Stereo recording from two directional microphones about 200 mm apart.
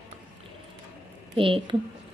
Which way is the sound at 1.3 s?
25° right (ahead or behind).